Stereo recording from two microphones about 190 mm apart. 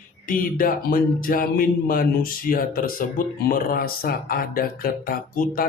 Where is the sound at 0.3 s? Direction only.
45° left (ahead or behind).